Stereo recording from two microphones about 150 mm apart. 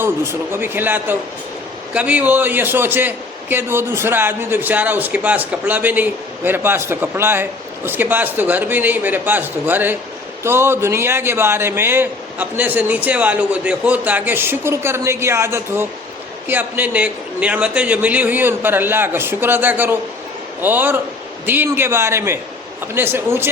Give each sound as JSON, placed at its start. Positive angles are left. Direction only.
{"t": 0.0, "sound": "a man's voice", "side_deg": -15}